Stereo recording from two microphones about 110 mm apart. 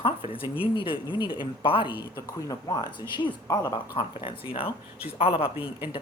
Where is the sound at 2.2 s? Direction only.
30° left (ahead or behind).